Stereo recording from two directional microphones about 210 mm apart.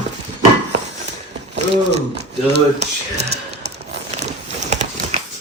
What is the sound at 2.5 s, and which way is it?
Speech, 55° right (ahead or behind).